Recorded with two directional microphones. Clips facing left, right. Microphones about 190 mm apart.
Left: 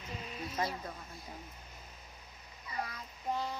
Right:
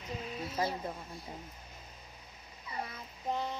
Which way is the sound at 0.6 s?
25° right (ahead or behind).